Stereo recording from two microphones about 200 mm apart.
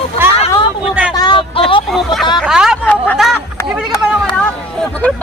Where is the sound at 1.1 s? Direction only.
25° left (ahead or behind).